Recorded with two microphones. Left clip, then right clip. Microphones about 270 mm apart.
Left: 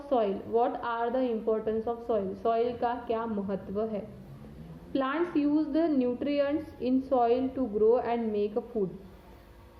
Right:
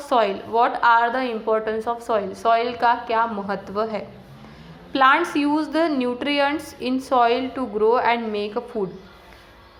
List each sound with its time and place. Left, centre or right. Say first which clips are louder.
0.1 s a woman's voice: right 8 dB; centre